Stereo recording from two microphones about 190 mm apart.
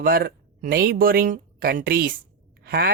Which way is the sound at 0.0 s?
50° right (ahead or behind).